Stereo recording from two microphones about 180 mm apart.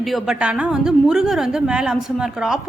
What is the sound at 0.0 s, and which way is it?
A woman's voice, centre (ahead or behind).